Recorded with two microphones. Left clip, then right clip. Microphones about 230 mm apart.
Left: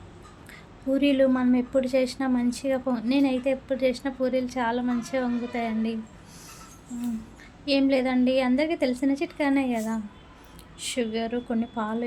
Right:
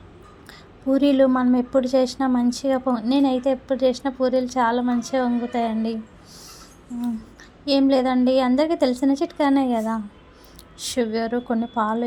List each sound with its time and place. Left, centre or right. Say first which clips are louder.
0.9 s a woman's voice: right 4 dB; centre
7.6 s a woman's voice: right 4 dB; centre